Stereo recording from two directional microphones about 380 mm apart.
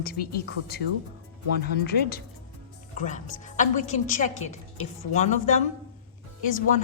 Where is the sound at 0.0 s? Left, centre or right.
Left.